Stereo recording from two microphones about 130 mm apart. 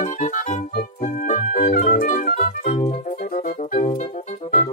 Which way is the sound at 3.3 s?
80° left.